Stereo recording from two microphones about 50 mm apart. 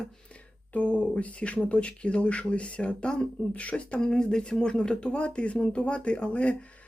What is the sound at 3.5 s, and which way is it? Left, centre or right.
Speech, left.